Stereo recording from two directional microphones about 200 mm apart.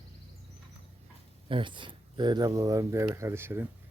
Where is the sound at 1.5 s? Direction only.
25° right (ahead or behind).